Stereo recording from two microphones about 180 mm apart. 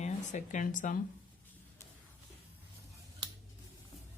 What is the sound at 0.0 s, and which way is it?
Speech, 40° left (ahead or behind).